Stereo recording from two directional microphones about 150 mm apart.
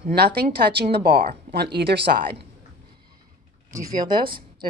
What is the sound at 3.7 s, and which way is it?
Speech, 30° right (ahead or behind).